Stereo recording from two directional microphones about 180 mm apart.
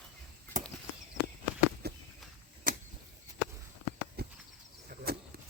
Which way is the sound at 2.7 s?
50° right (ahead or behind).